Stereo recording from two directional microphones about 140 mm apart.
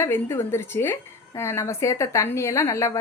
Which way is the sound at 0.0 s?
15° left (ahead or behind).